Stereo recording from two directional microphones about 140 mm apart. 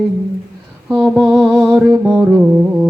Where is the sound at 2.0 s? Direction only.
15° right (ahead or behind).